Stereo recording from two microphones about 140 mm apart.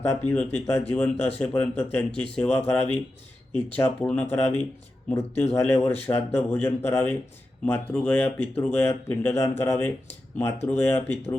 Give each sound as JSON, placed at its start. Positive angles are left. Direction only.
{"t": 0.1, "sound": "speech", "side_deg": 10}